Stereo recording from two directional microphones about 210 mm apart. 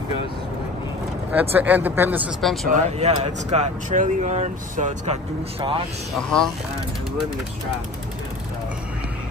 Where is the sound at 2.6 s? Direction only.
30° right (ahead or behind).